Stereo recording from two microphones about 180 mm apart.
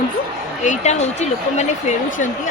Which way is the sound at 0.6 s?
40° left (ahead or behind).